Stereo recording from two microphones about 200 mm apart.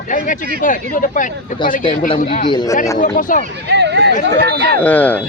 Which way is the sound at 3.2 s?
40° left (ahead or behind).